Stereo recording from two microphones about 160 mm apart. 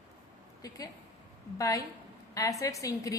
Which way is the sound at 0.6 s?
20° left (ahead or behind).